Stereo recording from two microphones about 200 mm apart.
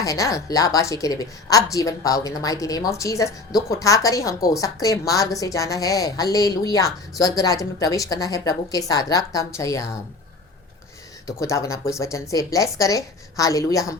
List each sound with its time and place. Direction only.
0.0 s a woman's voice: 15° left (ahead or behind)
11.3 s a woman's voice: 15° left (ahead or behind)